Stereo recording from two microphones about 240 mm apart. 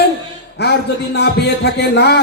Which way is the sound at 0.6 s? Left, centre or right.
Left.